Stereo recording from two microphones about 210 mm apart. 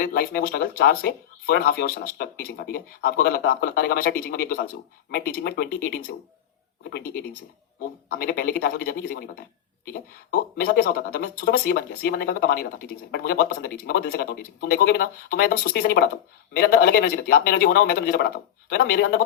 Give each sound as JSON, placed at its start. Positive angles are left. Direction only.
{"t": 0.0, "sound": "speech", "side_deg": 45}